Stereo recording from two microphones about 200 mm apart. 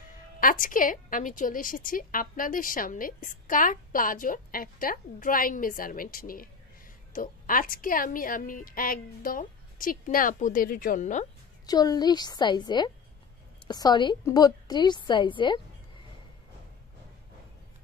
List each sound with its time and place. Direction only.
0.4 s a woman's voice: 45° left (ahead or behind)
11.6 s a woman's voice: 20° left (ahead or behind)